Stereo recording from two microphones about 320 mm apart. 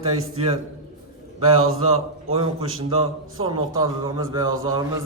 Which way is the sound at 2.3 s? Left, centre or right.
Centre.